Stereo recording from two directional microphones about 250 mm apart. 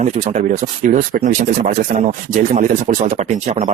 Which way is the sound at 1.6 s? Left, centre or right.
Right.